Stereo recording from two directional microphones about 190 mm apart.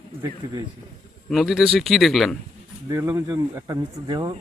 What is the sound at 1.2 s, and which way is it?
A man's voice, centre (ahead or behind).